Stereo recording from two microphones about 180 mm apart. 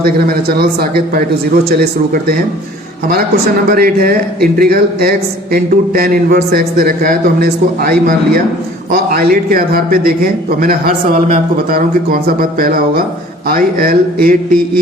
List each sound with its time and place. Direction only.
0.0 s a man's voice: 55° right (ahead or behind)
3.7 s a man's voice: 55° right (ahead or behind)